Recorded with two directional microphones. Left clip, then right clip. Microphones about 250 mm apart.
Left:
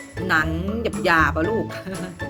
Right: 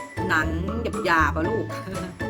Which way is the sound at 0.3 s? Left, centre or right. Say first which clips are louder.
Left 3 dB; centre.